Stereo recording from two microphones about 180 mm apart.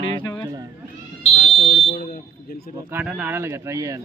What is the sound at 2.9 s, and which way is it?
Speech, 10° right (ahead or behind).